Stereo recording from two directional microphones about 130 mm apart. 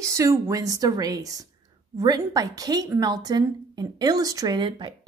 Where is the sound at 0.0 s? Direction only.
25° right (ahead or behind).